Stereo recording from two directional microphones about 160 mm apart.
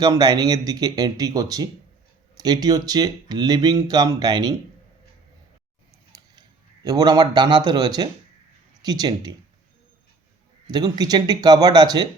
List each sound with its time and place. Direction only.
0.0 s speech: 25° right (ahead or behind)
6.8 s speech: 25° right (ahead or behind)
10.7 s speech: 25° right (ahead or behind)